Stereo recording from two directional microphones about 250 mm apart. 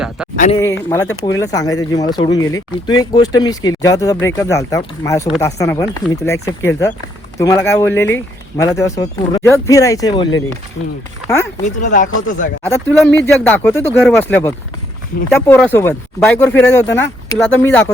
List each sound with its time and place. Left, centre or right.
0.6 s speech: centre
11.6 s speech: left
12.6 s speech: centre